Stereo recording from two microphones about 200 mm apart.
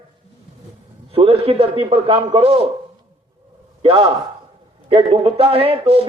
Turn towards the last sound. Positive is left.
turn(degrees=-30)  # may be behind; listen again after turning